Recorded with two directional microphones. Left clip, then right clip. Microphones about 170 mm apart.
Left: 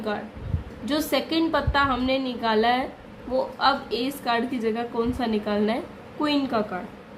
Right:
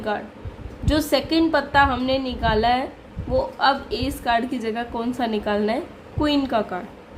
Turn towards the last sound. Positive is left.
turn(degrees=-25)  # may be behind; listen again after turning